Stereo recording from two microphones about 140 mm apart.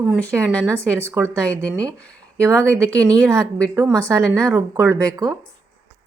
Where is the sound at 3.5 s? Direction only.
20° right (ahead or behind).